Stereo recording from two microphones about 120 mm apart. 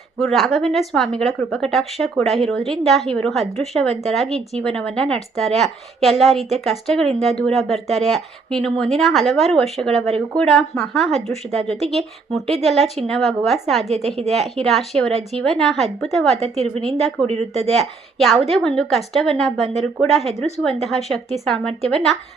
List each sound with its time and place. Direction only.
0.2 s a woman's voice: centre (ahead or behind)
16.3 s a woman's voice: 60° right (ahead or behind)
16.6 s a woman's voice: 5° left (ahead or behind)
17.5 s a woman's voice: 60° right (ahead or behind)
18.4 s speech: centre (ahead or behind)